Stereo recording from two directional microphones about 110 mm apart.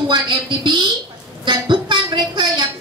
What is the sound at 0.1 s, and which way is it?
Speech, 45° right (ahead or behind).